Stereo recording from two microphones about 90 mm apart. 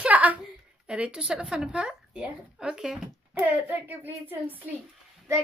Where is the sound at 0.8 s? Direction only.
10° right (ahead or behind).